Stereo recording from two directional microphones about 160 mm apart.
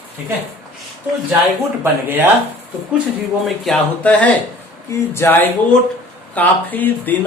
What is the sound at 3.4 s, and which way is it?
Speech, centre (ahead or behind).